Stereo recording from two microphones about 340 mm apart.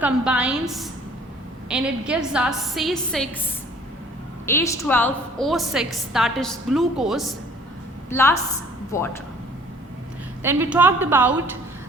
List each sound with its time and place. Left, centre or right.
0.0 s a woman's voice: centre
4.4 s a woman's voice: centre
10.4 s a woman's voice: centre